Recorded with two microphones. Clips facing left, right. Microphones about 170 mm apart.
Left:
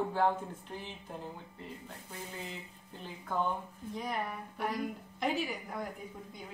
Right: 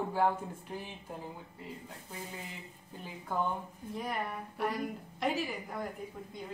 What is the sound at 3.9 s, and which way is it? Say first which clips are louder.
Speech: even; centre (ahead or behind).